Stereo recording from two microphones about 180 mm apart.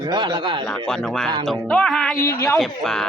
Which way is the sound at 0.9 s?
Centre (ahead or behind).